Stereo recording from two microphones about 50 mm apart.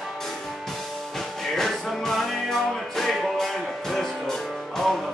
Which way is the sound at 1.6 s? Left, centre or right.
Centre.